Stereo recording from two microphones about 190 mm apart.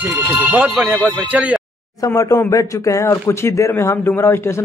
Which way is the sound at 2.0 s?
15° left (ahead or behind).